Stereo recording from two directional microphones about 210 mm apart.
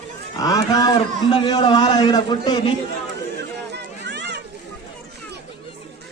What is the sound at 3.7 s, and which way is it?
Run, 55° right (ahead or behind).